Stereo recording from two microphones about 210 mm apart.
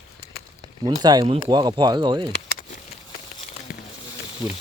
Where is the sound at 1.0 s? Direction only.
20° right (ahead or behind).